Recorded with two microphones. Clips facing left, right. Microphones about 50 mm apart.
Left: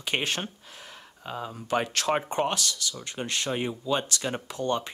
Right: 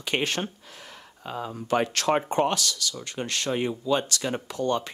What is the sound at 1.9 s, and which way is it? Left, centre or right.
Speech, right.